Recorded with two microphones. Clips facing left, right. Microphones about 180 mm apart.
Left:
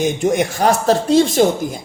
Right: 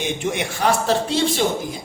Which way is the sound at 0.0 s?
40° left (ahead or behind).